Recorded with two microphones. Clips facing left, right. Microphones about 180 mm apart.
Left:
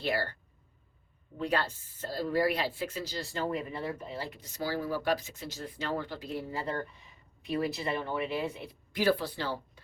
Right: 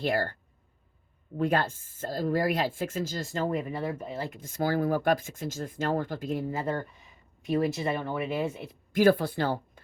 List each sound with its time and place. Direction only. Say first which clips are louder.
0.0 s speech: right 4 dB; 45° right (ahead or behind)
1.4 s speech: right 5 dB; 50° right (ahead or behind)